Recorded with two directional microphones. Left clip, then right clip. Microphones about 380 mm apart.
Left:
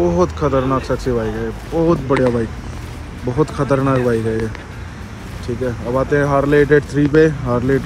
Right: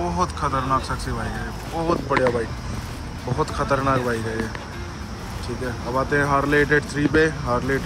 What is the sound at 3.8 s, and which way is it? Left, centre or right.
Speech, left.